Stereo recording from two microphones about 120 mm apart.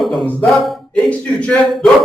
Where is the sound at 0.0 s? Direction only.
Centre (ahead or behind).